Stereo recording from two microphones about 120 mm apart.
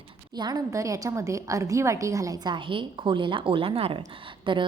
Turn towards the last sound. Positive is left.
turn(degrees=-45)  # may be behind; listen again after turning